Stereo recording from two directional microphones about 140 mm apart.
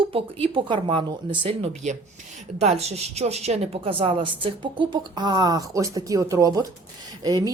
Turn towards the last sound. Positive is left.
turn(degrees=-25)  # may be behind; listen again after turning